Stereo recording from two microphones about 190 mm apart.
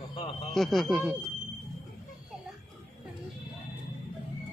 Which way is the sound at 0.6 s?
Centre (ahead or behind).